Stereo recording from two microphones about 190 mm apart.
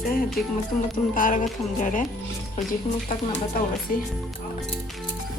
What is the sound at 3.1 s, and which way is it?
Speech, 50° left (ahead or behind).